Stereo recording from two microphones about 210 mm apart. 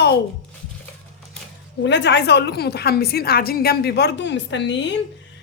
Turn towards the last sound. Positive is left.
turn(degrees=55)  # may be behind; listen again after turning